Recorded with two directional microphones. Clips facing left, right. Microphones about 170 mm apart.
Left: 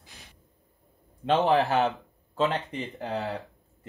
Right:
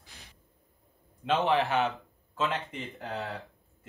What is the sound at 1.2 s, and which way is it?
Speech, 35° left (ahead or behind).